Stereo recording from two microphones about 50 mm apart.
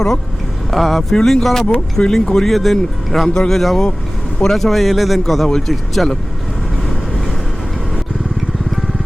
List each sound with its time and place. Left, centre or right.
0.7 s speech: centre
1.6 s speech: left; by 3.2 s centre
3.2 s speech: centre
3.5 s speech: centre